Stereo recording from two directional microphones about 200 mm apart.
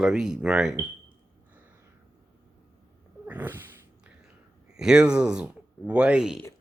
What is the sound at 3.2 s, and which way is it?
Cat, 10° right (ahead or behind).